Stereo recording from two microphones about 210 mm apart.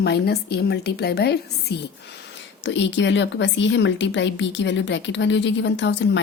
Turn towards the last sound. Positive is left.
turn(degrees=60)  # may be behind; listen again after turning